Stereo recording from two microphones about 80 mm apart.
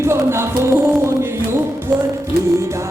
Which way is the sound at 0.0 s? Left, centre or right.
Right.